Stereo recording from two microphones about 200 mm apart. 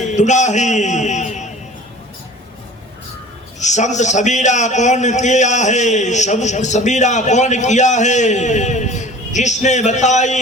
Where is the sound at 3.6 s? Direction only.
35° left (ahead or behind).